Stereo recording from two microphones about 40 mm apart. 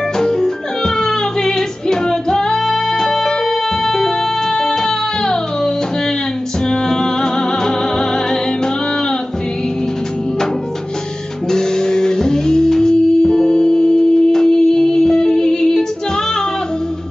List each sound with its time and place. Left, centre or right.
0.2 s music: centre
6.7 s music: centre
11.5 s music: centre